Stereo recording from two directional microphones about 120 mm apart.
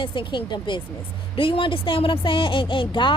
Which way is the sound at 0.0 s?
45° left (ahead or behind).